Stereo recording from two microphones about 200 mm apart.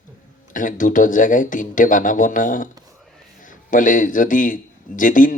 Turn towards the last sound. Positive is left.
turn(degrees=40)  # may be behind; listen again after turning